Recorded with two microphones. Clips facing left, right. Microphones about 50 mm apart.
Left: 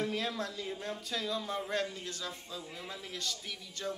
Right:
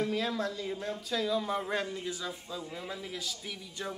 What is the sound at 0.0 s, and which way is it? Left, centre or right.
A man's voice, centre.